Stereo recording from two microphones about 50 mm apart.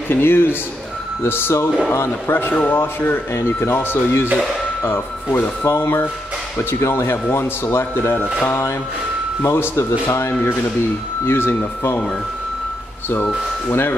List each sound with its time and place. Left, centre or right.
0.1 s speech: left
8.5 s speech: left
13.7 s speech: left